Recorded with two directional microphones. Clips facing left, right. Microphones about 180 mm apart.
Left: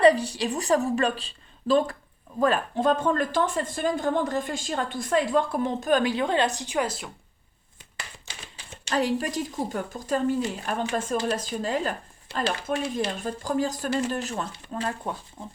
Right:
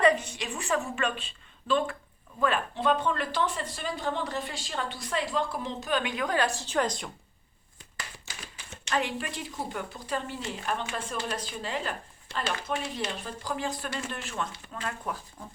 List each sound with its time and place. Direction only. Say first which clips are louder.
0.0 s speech: left 5 dB; 35° left (ahead or behind); by 7.1 s 5° left (ahead or behind)
8.7 s speech: left 5 dB; 35° left (ahead or behind)